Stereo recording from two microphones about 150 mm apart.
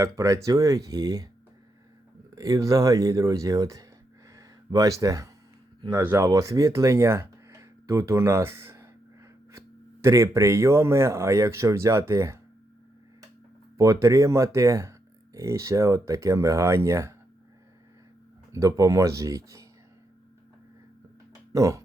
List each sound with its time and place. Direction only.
0.0 s speech: 20° right (ahead or behind)
2.3 s speech: 20° right (ahead or behind)
13.7 s speech: 20° right (ahead or behind)
18.5 s speech: 20° right (ahead or behind)
21.5 s speech: 20° right (ahead or behind)